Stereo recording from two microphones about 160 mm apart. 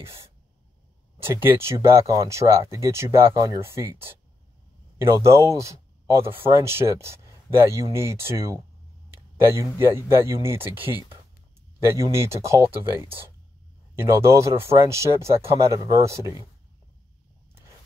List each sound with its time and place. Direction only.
1.2 s speech: 15° right (ahead or behind)
9.8 s speech: 15° right (ahead or behind)